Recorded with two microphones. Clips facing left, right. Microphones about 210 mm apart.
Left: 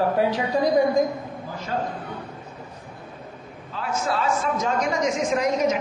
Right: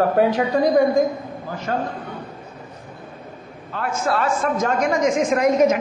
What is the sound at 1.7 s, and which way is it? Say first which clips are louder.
Speech: right 4 dB; 60° right (ahead or behind).